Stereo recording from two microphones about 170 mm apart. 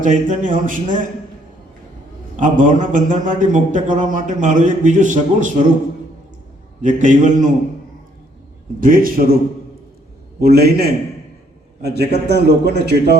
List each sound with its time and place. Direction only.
0.0 s a man's voice: 50° right (ahead or behind)
2.3 s a man's voice: 50° right (ahead or behind)
6.8 s a man's voice: 50° right (ahead or behind)
8.8 s a man's voice: 55° right (ahead or behind)
10.4 s a man's voice: 65° right (ahead or behind)